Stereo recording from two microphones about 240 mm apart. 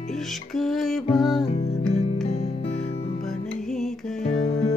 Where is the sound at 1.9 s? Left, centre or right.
Left.